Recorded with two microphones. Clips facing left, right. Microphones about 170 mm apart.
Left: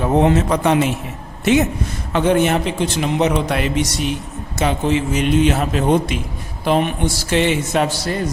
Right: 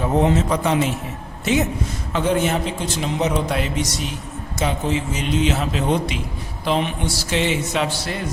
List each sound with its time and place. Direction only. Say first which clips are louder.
0.2 s a man's voice: left 3 dB; 65° left (ahead or behind)
2.1 s a man's voice: left 4 dB; 65° left (ahead or behind); by 8.3 s 40° left (ahead or behind)